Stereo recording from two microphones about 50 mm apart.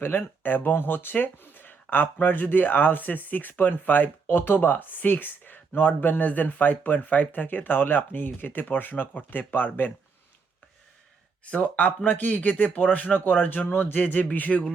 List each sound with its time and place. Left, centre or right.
0.0 s speech: left
11.5 s speech: left